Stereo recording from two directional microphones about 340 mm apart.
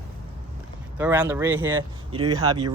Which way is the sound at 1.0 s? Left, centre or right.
Centre.